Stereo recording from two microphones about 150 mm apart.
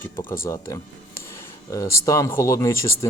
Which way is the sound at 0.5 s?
20° left (ahead or behind).